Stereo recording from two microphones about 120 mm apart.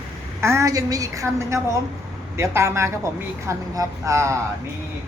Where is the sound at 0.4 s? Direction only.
25° right (ahead or behind).